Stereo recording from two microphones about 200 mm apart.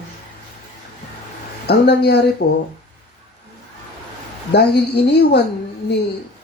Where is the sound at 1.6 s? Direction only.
55° left (ahead or behind).